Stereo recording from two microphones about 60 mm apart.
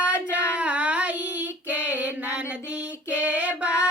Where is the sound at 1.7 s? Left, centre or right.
Right.